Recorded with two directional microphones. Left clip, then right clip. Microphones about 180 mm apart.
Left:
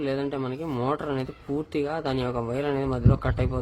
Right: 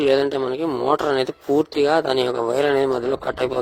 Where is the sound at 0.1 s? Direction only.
45° right (ahead or behind).